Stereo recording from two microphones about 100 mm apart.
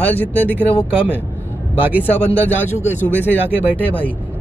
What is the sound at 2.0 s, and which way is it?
Speech, 20° left (ahead or behind).